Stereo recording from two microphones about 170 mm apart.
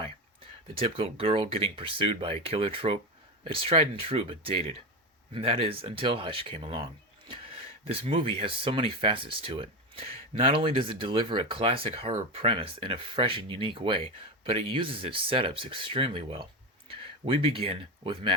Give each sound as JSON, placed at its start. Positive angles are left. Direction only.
{"t": 0.8, "sound": "speech", "side_deg": -35}